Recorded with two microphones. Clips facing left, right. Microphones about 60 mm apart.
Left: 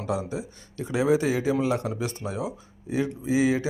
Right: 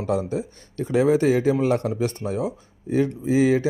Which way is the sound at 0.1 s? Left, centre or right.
Right.